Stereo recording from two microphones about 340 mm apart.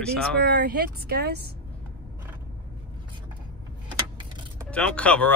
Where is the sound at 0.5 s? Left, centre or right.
Right.